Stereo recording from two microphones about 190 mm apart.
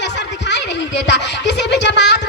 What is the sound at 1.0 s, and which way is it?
Music, 65° left (ahead or behind).